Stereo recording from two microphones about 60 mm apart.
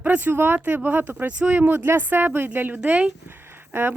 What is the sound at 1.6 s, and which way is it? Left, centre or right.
Speech, right.